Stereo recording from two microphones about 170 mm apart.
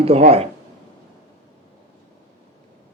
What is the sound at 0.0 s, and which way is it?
Speech, 35° right (ahead or behind).